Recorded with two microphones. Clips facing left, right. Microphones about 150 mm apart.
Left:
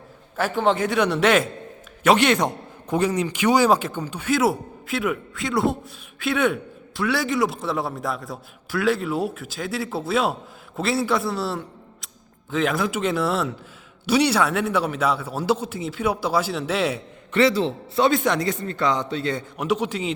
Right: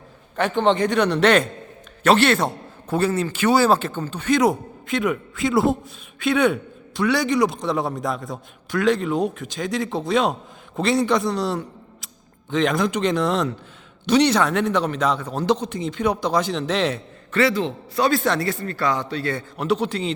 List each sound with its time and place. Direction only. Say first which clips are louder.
0.3 s a man's voice: right 2 dB; 5° left (ahead or behind)
17.5 s a man's voice: left 1 dB; 30° left (ahead or behind); by 20.1 s 10° left (ahead or behind)